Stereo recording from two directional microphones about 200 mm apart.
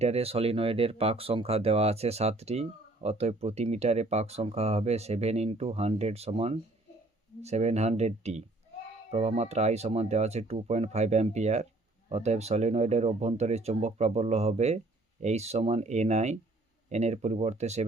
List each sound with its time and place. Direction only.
0.0 s speech: 30° right (ahead or behind)